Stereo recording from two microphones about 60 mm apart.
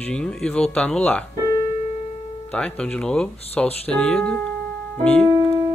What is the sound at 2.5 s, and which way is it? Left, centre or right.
Speech, centre.